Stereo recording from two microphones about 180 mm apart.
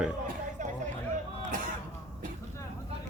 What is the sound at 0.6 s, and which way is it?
Hubbub, 45° right (ahead or behind).